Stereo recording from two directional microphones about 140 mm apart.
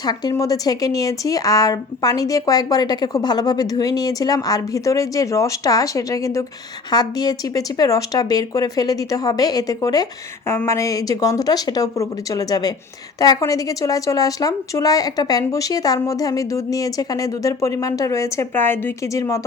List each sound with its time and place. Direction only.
0.0 s a woman's voice: 30° left (ahead or behind)